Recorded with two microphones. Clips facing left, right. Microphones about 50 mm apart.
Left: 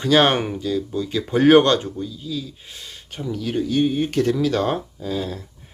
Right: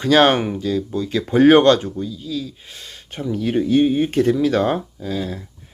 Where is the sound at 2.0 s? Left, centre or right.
Centre.